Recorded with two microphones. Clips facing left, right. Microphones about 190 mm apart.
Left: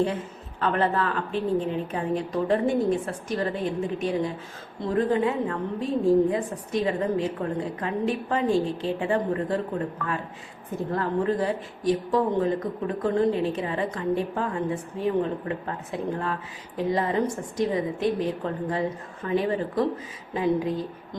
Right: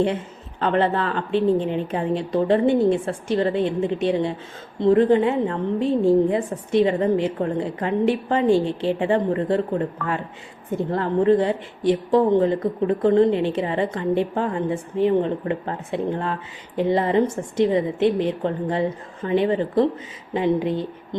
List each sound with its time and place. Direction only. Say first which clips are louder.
0.6 s a woman's voice: right 4 dB; 25° right (ahead or behind)
10.9 s a woman's voice: right 7 dB; 30° right (ahead or behind)